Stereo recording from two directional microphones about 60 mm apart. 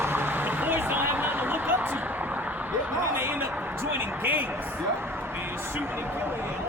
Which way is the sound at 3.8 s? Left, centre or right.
Right.